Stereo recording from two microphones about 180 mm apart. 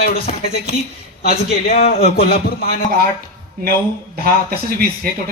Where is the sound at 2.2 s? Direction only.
55° left (ahead or behind).